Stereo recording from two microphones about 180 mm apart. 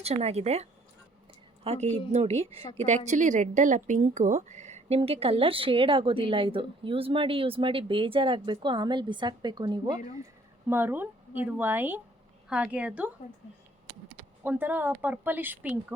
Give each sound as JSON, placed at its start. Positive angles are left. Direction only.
{"t": 0.0, "sound": "a woman's voice", "side_deg": -35}
{"t": 10.7, "sound": "a woman's voice", "side_deg": -10}
{"t": 14.4, "sound": "a woman's voice", "side_deg": -10}